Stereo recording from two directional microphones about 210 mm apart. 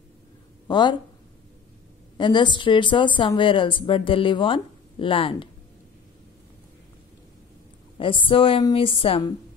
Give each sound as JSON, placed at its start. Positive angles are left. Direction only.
{"t": 0.7, "sound": "speech", "side_deg": 20}
{"t": 2.1, "sound": "speech", "side_deg": 20}
{"t": 8.0, "sound": "speech", "side_deg": 25}